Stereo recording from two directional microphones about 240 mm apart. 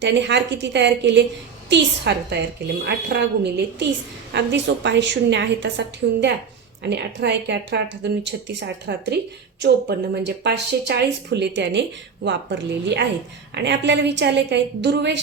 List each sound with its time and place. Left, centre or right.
0.0 s speech: right